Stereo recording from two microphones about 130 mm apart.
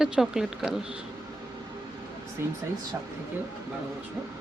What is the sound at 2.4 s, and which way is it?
Speech, 20° right (ahead or behind).